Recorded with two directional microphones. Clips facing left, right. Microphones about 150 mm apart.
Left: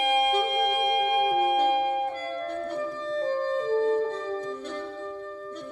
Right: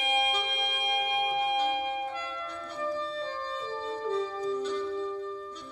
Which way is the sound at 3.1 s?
50° left (ahead or behind).